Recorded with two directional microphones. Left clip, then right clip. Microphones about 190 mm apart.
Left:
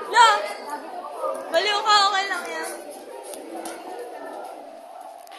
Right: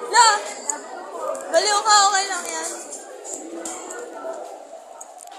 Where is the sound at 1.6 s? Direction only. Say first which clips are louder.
Right 2 dB; 20° right (ahead or behind).